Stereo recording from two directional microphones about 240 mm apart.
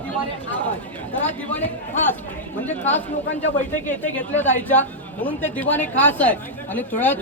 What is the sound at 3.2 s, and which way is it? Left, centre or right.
Speech, left.